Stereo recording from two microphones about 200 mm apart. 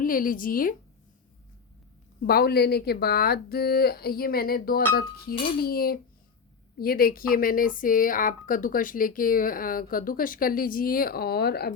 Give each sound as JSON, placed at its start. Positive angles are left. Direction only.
{"t": 0.0, "sound": "speech", "side_deg": 45}
{"t": 2.2, "sound": "speech", "side_deg": 50}